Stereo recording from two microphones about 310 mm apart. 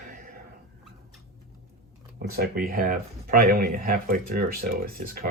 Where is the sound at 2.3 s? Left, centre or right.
Right.